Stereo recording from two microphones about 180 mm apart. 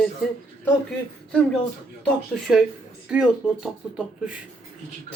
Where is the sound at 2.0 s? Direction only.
Centre (ahead or behind).